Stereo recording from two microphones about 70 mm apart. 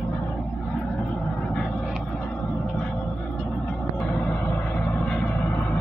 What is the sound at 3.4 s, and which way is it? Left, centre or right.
Music, left.